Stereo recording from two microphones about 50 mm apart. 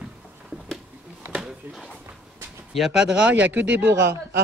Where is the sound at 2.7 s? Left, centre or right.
Centre.